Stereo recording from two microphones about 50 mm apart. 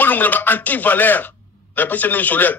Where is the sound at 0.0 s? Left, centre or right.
Left.